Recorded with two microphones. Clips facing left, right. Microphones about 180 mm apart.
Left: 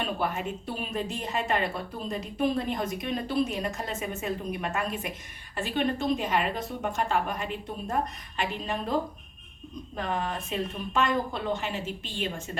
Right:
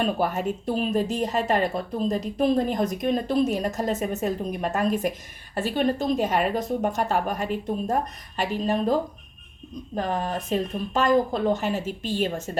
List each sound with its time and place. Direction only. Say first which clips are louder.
0.0 s a woman's voice: right 6 dB; 45° right (ahead or behind)
9.9 s speech: right 4 dB; 40° right (ahead or behind)